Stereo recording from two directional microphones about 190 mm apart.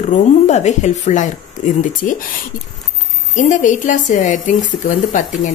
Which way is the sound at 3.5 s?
40° left (ahead or behind).